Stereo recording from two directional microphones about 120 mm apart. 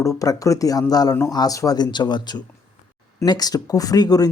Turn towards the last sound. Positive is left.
turn(degrees=30)  # may be behind; listen again after turning